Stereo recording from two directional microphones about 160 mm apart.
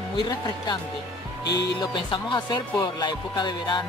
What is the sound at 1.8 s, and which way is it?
Speech, 25° left (ahead or behind).